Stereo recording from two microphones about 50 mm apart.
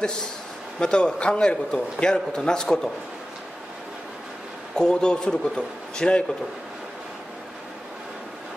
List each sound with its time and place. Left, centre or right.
0.0 s a man's voice: centre
4.7 s a man's voice: centre